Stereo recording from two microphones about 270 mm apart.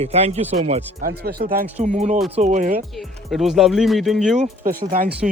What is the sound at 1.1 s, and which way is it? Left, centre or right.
A man's voice, right.